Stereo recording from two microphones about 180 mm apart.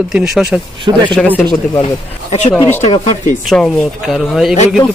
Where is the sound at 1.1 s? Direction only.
10° left (ahead or behind).